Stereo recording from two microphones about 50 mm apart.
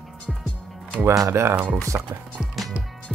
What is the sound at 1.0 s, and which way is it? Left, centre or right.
Speech, right.